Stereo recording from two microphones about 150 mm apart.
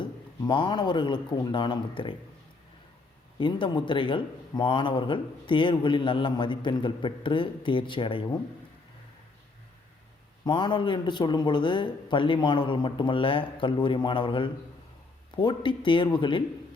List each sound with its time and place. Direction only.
0.0 s a man's voice: 30° left (ahead or behind)
3.3 s speech: 30° left (ahead or behind)
10.4 s speech: 30° left (ahead or behind)